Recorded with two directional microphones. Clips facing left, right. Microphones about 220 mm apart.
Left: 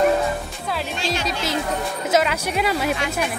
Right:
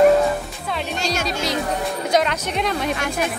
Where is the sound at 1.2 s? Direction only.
Centre (ahead or behind).